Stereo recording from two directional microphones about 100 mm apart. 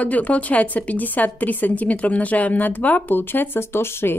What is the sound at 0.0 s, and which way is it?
A woman's voice, 15° left (ahead or behind).